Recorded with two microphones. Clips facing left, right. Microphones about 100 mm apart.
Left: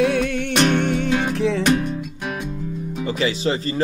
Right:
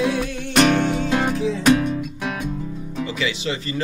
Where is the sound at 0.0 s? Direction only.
60° left (ahead or behind).